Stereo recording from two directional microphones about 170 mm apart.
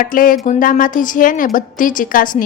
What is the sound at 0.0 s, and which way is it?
A woman's voice, 55° left (ahead or behind).